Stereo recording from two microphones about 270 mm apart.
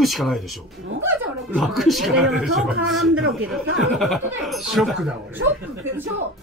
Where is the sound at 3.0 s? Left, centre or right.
Right.